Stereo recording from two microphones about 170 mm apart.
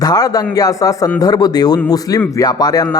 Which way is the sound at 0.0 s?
20° left (ahead or behind).